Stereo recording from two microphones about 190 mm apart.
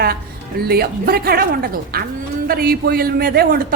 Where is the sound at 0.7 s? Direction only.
55° right (ahead or behind).